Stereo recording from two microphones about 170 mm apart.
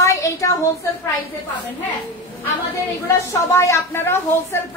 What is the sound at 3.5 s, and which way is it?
Speech, 15° left (ahead or behind).